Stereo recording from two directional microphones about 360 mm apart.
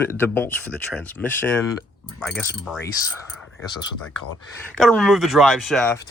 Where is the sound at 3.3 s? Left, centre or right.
Centre.